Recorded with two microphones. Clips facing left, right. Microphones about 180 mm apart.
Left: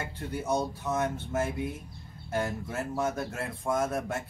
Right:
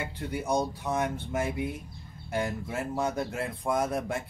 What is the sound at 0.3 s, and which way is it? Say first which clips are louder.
Speech: right 1 dB; 15° right (ahead or behind).